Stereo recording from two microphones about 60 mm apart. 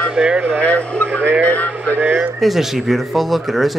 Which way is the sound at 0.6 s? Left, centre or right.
Left.